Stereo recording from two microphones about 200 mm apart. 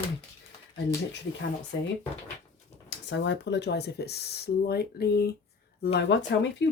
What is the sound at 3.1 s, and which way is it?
Speech, 60° left (ahead or behind).